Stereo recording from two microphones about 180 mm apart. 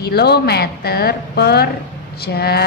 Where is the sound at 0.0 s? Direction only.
60° left (ahead or behind).